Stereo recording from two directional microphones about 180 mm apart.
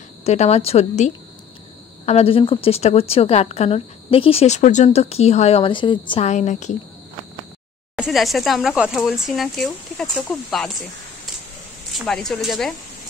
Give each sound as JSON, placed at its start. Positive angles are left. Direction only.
{"t": 0.2, "sound": "speech", "side_deg": 35}
{"t": 8.0, "sound": "speech", "side_deg": 0}
{"t": 11.9, "sound": "speech", "side_deg": 0}